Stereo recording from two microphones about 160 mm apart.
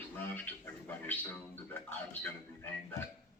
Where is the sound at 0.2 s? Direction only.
15° left (ahead or behind).